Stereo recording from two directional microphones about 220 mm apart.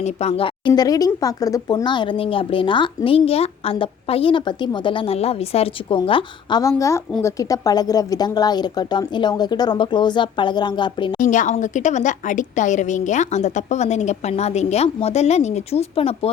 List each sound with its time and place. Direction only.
0.0 s speech: 30° left (ahead or behind)
11.2 s a woman's voice: 35° left (ahead or behind)